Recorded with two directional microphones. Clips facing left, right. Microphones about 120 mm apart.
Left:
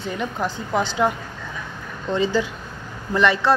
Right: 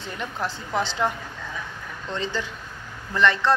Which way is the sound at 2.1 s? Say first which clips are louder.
Left 8 dB; 10° left (ahead or behind).